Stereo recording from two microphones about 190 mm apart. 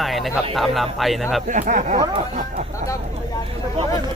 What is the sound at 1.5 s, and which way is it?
Speech, 40° right (ahead or behind).